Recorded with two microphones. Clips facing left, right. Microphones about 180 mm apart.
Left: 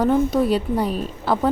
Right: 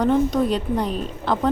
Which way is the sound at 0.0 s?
5° left (ahead or behind).